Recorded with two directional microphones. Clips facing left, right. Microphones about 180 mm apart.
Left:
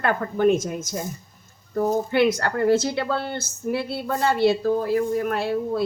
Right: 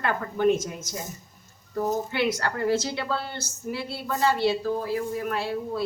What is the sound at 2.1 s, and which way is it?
A woman's voice, 50° left (ahead or behind).